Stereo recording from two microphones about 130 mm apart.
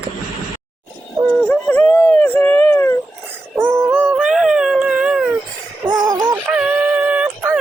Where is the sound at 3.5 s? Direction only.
20° right (ahead or behind).